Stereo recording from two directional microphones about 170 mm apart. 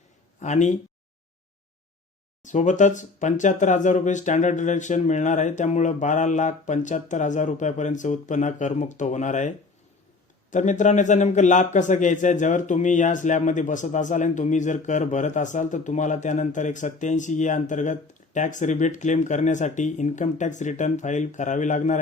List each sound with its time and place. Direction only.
0.3 s speech: 45° left (ahead or behind)
2.4 s speech: 45° left (ahead or behind)
10.5 s speech: 45° left (ahead or behind)